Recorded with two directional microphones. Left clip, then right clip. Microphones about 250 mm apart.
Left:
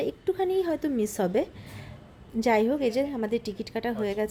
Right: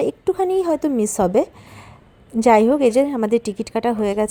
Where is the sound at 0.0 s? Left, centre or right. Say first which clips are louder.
Right 8 dB; right.